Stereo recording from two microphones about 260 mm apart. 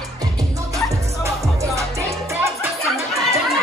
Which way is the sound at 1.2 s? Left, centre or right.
Centre.